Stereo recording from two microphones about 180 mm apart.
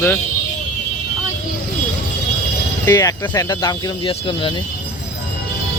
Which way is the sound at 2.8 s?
20° left (ahead or behind).